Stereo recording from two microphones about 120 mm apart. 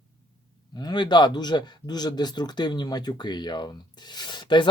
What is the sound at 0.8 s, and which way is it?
Speech, 35° left (ahead or behind).